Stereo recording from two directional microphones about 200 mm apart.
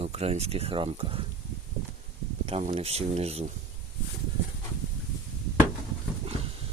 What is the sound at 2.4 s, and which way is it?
Speech, 35° right (ahead or behind).